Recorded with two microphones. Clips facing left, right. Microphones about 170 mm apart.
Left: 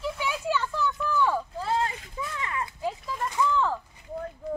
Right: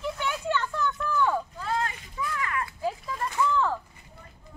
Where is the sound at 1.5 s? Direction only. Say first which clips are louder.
Left 2 dB; 30° left (ahead or behind).